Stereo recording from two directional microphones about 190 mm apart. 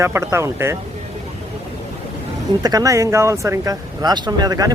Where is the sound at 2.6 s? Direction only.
20° right (ahead or behind).